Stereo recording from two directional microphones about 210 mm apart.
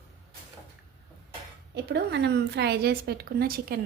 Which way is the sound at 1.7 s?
55° right (ahead or behind).